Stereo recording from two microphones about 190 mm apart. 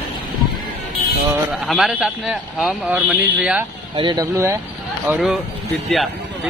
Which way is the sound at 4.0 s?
25° right (ahead or behind).